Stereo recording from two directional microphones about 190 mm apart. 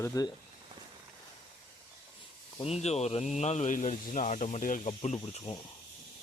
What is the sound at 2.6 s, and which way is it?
Speech, 35° left (ahead or behind).